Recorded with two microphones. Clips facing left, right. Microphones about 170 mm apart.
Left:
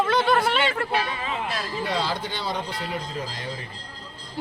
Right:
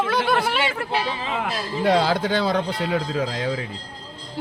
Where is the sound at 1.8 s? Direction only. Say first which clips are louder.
Right 11 dB; 90° right.